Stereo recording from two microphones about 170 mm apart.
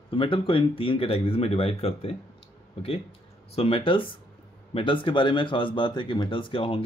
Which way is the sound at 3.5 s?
35° left (ahead or behind).